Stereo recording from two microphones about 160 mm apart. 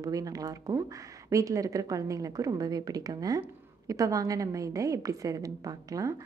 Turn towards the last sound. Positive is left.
turn(degrees=-20)  # may be behind; listen again after turning